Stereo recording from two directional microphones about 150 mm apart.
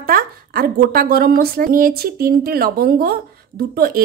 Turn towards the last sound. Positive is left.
turn(degrees=-85)